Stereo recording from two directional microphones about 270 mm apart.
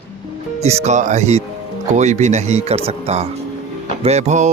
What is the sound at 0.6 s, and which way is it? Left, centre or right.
Speech, right.